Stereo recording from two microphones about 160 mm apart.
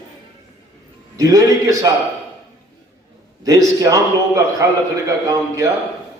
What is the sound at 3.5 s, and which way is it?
A man's voice, 20° right (ahead or behind).